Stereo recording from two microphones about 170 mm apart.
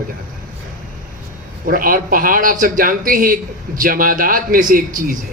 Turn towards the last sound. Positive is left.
turn(degrees=-50)  # may be behind; listen again after turning